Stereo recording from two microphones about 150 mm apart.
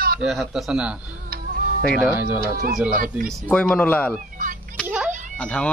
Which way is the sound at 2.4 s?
90° right.